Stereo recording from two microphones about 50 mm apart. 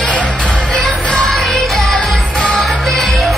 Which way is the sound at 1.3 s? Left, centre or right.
Centre.